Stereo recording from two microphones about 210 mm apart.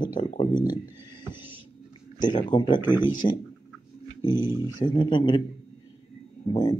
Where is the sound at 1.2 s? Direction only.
10° right (ahead or behind).